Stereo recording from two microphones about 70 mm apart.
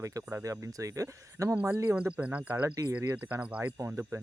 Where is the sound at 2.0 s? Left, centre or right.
Centre.